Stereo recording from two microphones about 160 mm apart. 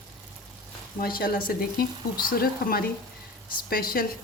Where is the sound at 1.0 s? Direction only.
65° left (ahead or behind).